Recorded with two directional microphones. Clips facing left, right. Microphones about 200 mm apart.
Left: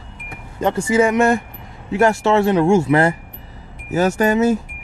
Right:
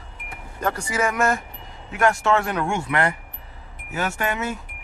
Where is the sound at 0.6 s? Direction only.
25° left (ahead or behind).